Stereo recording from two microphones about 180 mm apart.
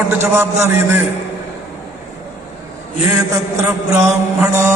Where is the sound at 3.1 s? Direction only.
15° right (ahead or behind).